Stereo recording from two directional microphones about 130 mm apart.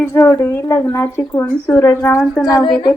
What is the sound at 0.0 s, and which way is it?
A woman's voice, 20° left (ahead or behind).